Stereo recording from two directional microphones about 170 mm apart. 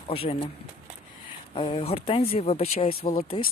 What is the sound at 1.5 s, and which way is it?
Speech, 30° left (ahead or behind).